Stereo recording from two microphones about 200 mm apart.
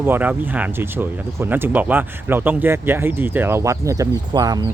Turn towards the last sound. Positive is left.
turn(degrees=-20)  # may be behind; listen again after turning